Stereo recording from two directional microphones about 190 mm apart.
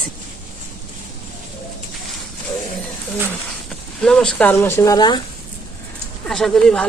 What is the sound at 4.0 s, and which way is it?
Speech, 5° left (ahead or behind).